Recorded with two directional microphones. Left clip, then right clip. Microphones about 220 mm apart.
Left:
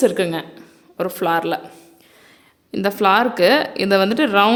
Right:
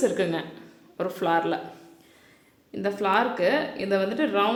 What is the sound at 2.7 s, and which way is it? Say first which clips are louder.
A woman's voice: left 8 dB; 40° left (ahead or behind).